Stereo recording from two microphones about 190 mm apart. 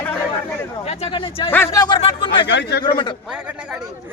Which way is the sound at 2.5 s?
70° left (ahead or behind).